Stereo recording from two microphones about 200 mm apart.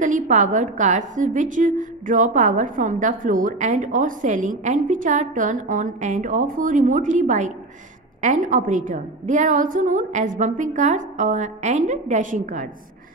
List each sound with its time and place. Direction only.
0.0 s a woman's voice: 40° right (ahead or behind)